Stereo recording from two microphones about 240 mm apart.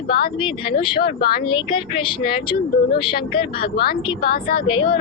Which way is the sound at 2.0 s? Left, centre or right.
Left.